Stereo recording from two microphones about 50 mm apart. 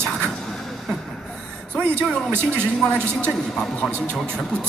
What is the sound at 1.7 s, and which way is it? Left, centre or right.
Speech, left.